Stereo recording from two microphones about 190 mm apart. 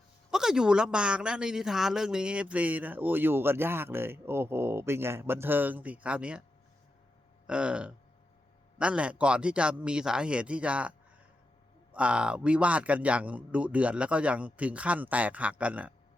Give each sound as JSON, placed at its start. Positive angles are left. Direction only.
{"t": 0.3, "sound": "speech", "side_deg": -5}
{"t": 7.4, "sound": "speech", "side_deg": -5}
{"t": 11.9, "sound": "speech", "side_deg": -5}